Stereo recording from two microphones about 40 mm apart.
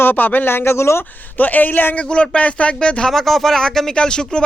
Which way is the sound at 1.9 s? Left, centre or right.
Left.